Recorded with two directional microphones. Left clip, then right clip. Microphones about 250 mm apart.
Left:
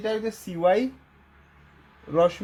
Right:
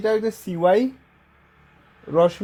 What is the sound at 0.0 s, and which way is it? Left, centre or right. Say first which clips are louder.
Speech: right 6 dB; right.